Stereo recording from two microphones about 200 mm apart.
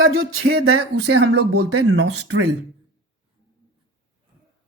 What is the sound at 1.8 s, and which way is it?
Speech, 90° right.